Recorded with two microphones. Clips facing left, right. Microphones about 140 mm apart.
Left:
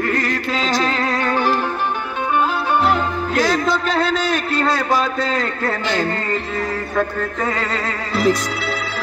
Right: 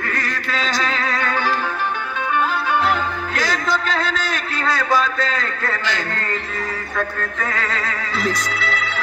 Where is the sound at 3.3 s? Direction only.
30° left (ahead or behind).